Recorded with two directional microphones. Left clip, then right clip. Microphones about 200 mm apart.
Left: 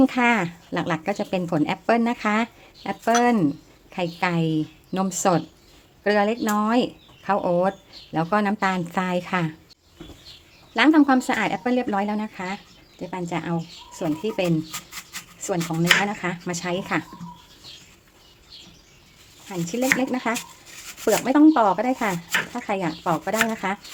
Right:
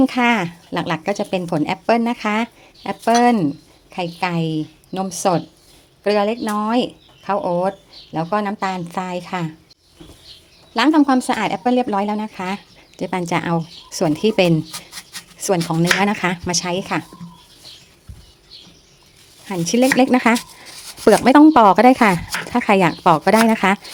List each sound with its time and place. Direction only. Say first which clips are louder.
0.0 s speech: right 3 dB; 15° right (ahead or behind)
10.8 s speech: right 2 dB; 15° right (ahead or behind)
13.0 s speech: right 8 dB; 40° right (ahead or behind); by 17.1 s 20° right (ahead or behind)
19.5 s speech: right 6 dB; 40° right (ahead or behind)